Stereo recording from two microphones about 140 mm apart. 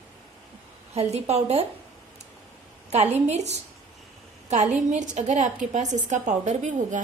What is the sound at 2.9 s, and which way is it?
A woman's voice, 50° right (ahead or behind).